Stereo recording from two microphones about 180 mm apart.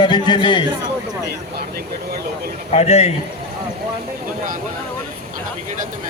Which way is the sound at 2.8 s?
35° left (ahead or behind).